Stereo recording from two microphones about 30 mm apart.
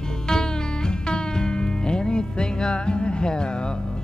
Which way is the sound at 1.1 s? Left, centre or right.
Left.